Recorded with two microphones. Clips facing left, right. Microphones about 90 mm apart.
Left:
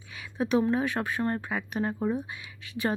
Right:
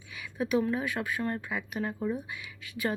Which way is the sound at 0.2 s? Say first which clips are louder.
Left 3 dB; 30° left (ahead or behind).